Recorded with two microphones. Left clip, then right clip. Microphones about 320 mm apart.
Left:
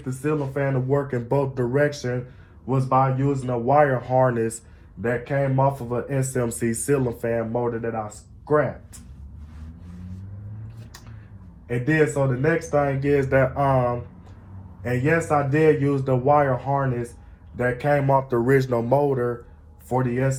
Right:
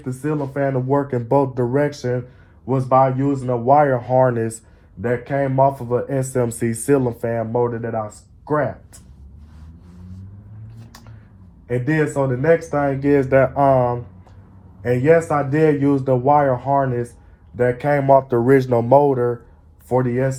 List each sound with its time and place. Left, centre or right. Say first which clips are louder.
0.0 s speech: right 2 dB; right
11.9 s speech: even; right